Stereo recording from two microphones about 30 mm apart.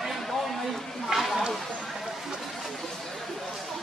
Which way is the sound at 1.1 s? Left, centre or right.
Right.